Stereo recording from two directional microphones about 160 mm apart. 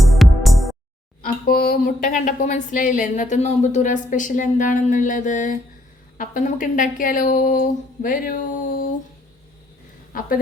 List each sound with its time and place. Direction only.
0.0 s music: centre (ahead or behind)
1.2 s speech: 70° left (ahead or behind)
10.1 s a sound: 65° left (ahead or behind)